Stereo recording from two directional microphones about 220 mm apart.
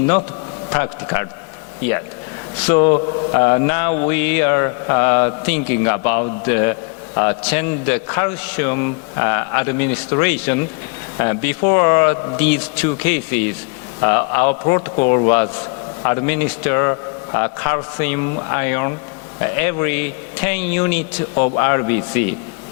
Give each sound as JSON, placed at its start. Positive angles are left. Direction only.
{"t": 0.7, "sound": "a man's voice", "side_deg": 15}
{"t": 2.6, "sound": "mantra", "side_deg": 20}
{"t": 4.1, "sound": "a man's voice", "side_deg": 15}
{"t": 14.0, "sound": "mantra", "side_deg": 20}
{"t": 16.0, "sound": "a man's voice", "side_deg": 15}